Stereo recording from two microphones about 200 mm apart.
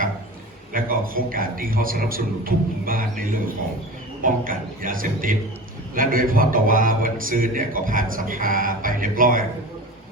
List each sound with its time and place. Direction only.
0.7 s a man's voice: 45° right (ahead or behind)